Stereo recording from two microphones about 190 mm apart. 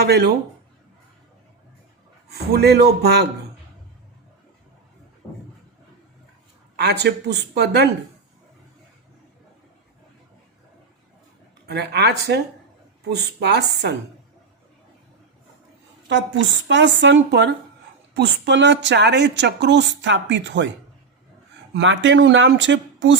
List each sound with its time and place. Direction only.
0.0 s speech: 60° right (ahead or behind)
2.3 s speech: 55° right (ahead or behind)
6.7 s speech: 60° right (ahead or behind)
11.6 s speech: 60° right (ahead or behind)
16.0 s speech: 70° right (ahead or behind)
21.7 s speech: 70° right (ahead or behind)